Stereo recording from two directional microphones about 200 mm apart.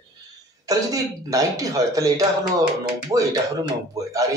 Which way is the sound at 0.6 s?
15° right (ahead or behind).